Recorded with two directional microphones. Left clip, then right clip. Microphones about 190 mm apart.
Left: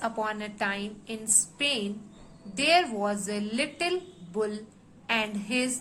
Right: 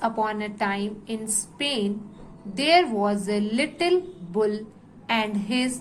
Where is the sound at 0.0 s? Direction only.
10° right (ahead or behind).